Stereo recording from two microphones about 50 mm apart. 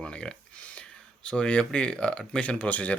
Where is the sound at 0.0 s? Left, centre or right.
Centre.